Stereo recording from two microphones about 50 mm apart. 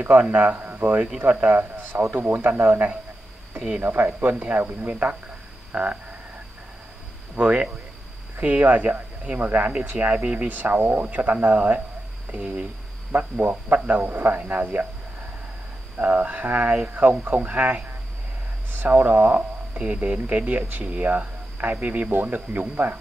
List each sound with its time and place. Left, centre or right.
0.2 s speech: right
1.6 s a sound: right
2.1 s speech: right
5.7 s frog: right
7.3 s speech: right
13.1 s speech: right
16.0 s speech: right